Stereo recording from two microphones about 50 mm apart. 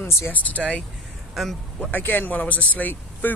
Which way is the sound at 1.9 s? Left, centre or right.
Left.